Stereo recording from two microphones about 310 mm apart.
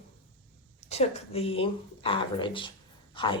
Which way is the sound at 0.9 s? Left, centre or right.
Centre.